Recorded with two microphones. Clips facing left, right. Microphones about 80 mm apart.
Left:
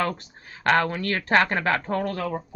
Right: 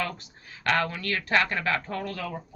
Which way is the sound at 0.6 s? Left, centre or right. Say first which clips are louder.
Left 5 dB; left.